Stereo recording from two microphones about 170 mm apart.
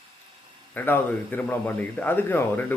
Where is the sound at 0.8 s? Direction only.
10° left (ahead or behind).